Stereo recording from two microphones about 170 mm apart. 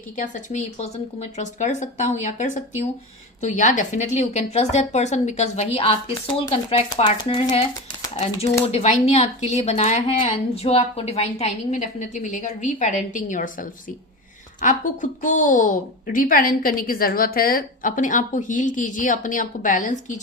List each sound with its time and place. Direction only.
0.2 s a woman's voice: 45° left (ahead or behind)
8.6 s a woman's voice: 40° left (ahead or behind)
15.2 s a woman's voice: 50° left (ahead or behind)